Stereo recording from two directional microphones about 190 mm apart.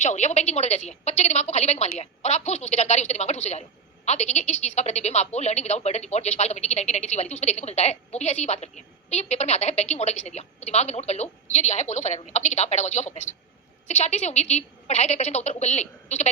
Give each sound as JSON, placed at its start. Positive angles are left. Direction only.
{"t": 0.0, "sound": "a woman's voice", "side_deg": 35}